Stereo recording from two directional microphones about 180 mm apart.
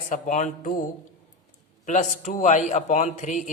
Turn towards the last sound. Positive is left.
turn(degrees=40)  # may be behind; listen again after turning